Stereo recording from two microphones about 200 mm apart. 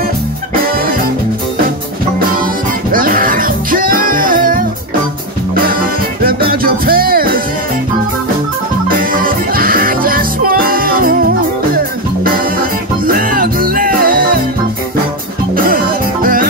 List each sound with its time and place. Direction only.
2.9 s music: 45° right (ahead or behind)
6.2 s music: 50° right (ahead or behind)
8.8 s music: 45° right (ahead or behind)
12.5 s music: 45° right (ahead or behind)
15.5 s music: 45° right (ahead or behind)